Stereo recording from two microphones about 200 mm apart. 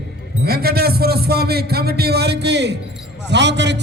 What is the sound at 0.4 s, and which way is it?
A man's voice, 50° right (ahead or behind).